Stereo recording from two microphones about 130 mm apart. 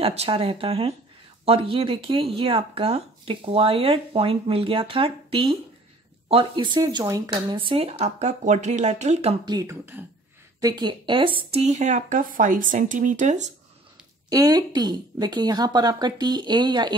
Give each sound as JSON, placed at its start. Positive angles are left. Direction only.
{"t": 0.0, "sound": "speech", "side_deg": -50}
{"t": 9.5, "sound": "speech", "side_deg": -30}
{"t": 11.6, "sound": "speech", "side_deg": -65}
{"t": 14.3, "sound": "speech", "side_deg": -30}